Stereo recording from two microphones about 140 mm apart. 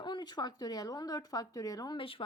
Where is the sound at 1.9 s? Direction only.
40° left (ahead or behind).